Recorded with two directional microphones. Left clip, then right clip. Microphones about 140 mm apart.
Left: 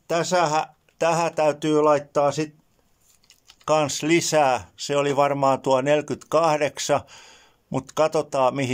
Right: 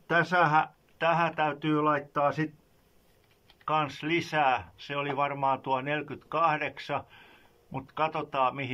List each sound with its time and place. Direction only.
0.0 s speech: 20° left (ahead or behind)
3.6 s speech: 35° left (ahead or behind)